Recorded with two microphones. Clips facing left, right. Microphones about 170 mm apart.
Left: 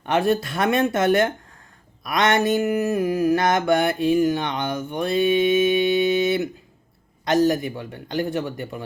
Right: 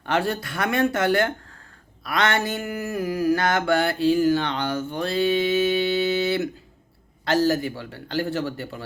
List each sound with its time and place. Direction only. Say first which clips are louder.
0.0 s mantra: left 4 dB; 20° left (ahead or behind)
7.3 s a man's voice: left 2 dB; 15° left (ahead or behind)